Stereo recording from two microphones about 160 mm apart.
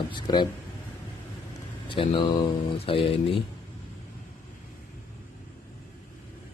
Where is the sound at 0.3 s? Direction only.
25° left (ahead or behind).